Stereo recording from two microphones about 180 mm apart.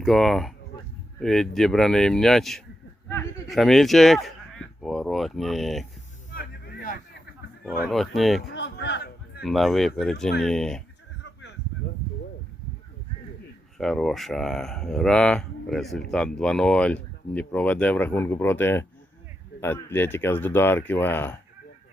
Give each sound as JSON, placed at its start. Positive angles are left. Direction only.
{"t": 0.0, "sound": "speech", "side_deg": 0}
{"t": 3.4, "sound": "speech", "side_deg": 0}
{"t": 6.3, "sound": "a sound", "side_deg": 55}
{"t": 7.9, "sound": "speech", "side_deg": 0}
{"t": 8.4, "sound": "a sound", "side_deg": 75}
{"t": 9.4, "sound": "speech", "side_deg": 0}
{"t": 13.7, "sound": "speech", "side_deg": 0}